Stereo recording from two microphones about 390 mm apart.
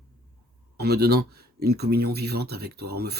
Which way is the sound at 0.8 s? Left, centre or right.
Right.